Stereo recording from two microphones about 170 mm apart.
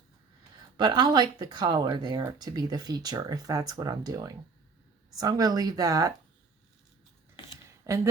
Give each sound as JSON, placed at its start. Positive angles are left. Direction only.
{"t": 0.8, "sound": "speech", "side_deg": -25}
{"t": 7.9, "sound": "speech", "side_deg": -20}